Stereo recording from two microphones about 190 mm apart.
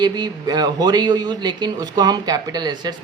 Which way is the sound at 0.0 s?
20° right (ahead or behind).